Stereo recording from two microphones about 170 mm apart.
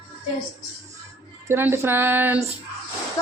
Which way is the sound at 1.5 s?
15° right (ahead or behind).